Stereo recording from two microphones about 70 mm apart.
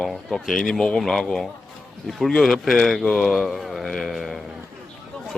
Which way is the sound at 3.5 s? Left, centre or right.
Centre.